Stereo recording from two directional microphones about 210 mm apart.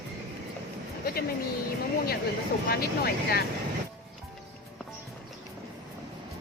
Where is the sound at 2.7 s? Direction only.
50° left (ahead or behind).